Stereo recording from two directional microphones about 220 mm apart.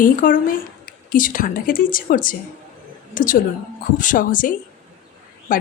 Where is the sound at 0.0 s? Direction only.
40° left (ahead or behind).